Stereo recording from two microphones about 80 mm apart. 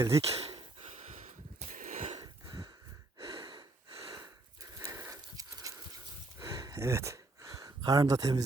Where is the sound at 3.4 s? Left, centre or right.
Right.